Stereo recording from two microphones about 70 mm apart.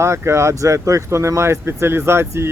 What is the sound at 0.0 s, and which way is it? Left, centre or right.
Speech, right.